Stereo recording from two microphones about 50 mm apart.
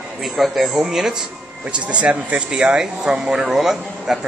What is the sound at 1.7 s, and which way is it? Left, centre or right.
Speech, right.